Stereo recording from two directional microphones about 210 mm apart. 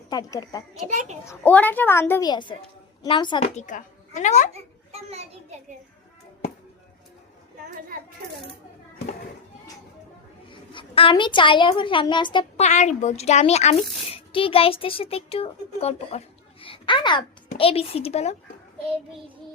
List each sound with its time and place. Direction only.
0.1 s a child's voice: 20° left (ahead or behind)
0.9 s a child's voice: 35° right (ahead or behind)
1.2 s a woman's voice: 10° left (ahead or behind); by 4.4 s 35° left (ahead or behind)
4.5 s a child's voice: 30° right (ahead or behind)
10.5 s a woman's voice: 25° left (ahead or behind)